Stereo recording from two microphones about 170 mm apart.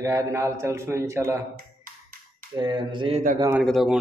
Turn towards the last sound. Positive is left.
turn(degrees=0)  # may be behind; listen again after turning